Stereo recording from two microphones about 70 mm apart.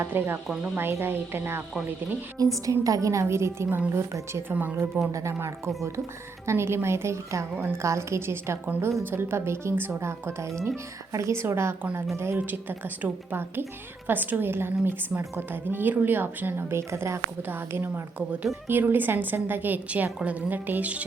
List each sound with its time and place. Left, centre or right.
0.0 s a woman's voice: right
2.4 s a woman's voice: right
4.5 s a woman's voice: right
5.1 s a woman's voice: right
12.4 s a woman's voice: right